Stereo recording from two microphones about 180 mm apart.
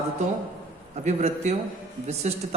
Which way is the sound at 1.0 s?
40° right (ahead or behind).